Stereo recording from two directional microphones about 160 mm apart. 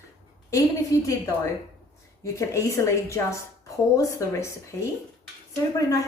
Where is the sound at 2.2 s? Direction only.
20° left (ahead or behind).